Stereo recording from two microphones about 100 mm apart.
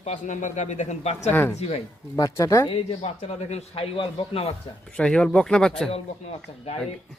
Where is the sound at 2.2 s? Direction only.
35° left (ahead or behind).